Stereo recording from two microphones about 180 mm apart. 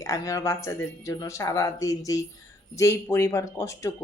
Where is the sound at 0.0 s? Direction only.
15° left (ahead or behind).